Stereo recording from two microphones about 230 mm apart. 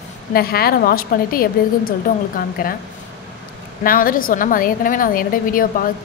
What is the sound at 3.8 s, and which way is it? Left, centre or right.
A woman's voice, left.